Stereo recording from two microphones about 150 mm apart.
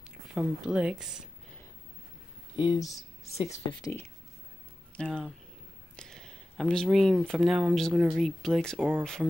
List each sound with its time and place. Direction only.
0.3 s speech: 5° right (ahead or behind)
2.5 s speech: 30° left (ahead or behind)
3.8 s speech: 15° left (ahead or behind)
5.0 s speech: 5° left (ahead or behind)
8.7 s speech: 10° right (ahead or behind)